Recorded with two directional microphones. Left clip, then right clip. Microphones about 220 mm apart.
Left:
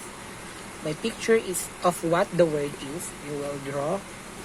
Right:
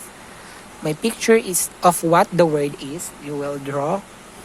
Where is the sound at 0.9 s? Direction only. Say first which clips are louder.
Right 7 dB; 35° right (ahead or behind).